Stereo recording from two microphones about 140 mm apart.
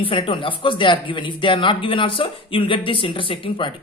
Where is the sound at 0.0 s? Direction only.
40° left (ahead or behind).